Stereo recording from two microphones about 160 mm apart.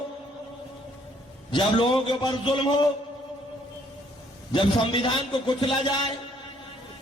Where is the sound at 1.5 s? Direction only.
30° left (ahead or behind).